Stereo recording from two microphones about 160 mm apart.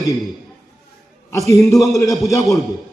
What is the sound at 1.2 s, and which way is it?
Speech, 20° left (ahead or behind).